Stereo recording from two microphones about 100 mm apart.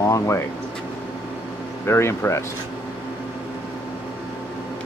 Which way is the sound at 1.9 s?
25° left (ahead or behind).